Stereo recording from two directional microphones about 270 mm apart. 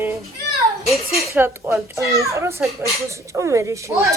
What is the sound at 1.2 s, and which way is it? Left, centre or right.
Speech, centre.